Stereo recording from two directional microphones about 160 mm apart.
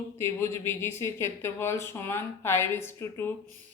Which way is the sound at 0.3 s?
15° left (ahead or behind).